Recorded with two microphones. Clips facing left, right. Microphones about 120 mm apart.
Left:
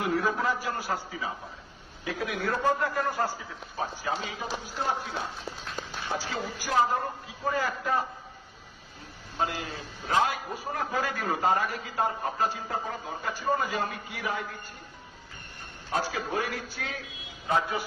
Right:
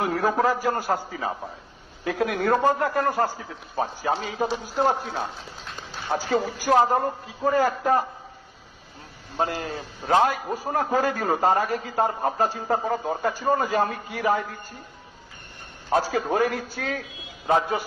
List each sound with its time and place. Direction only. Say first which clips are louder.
0.0 s a man's voice: right 5 dB; 50° right (ahead or behind)
9.4 s a man's voice: right 5 dB; 45° right (ahead or behind)
15.9 s a man's voice: right 7 dB; 45° right (ahead or behind)